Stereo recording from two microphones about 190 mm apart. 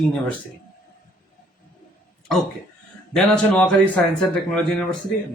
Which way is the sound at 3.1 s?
5° left (ahead or behind).